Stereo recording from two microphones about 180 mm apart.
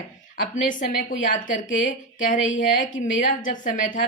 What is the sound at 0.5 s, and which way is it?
A woman's voice, 45° left (ahead or behind).